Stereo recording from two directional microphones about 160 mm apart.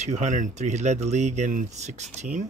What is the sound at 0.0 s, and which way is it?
Speech, 50° right (ahead or behind).